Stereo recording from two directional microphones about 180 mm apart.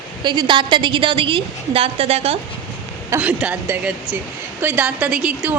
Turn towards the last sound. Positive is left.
turn(degrees=-5)  # may be behind; listen again after turning